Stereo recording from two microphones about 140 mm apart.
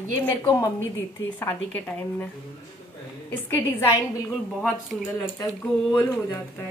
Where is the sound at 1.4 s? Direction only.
15° left (ahead or behind).